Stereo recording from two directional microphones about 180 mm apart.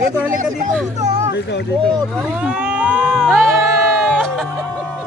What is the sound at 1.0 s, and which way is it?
Speech, 40° right (ahead or behind).